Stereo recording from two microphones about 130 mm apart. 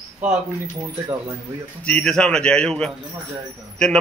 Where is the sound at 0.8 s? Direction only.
30° right (ahead or behind).